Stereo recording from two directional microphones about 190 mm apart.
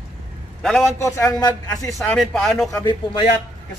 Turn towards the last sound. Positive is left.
turn(degrees=20)  # may be behind; listen again after turning